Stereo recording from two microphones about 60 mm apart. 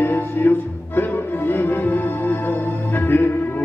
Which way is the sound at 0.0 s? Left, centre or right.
Left.